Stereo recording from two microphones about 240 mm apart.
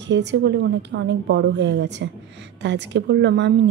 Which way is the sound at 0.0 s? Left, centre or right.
Right.